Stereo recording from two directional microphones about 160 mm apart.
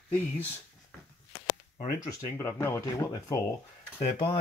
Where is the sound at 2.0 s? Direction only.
15° left (ahead or behind).